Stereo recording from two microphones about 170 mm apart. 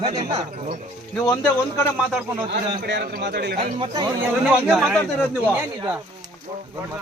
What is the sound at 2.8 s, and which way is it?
Speech, 80° right.